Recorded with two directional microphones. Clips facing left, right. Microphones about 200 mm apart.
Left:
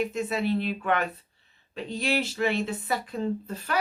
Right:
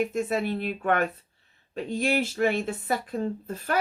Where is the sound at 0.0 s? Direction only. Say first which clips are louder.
Right 1 dB; 50° right (ahead or behind).